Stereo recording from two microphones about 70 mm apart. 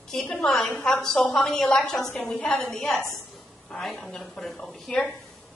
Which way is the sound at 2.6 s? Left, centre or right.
Centre.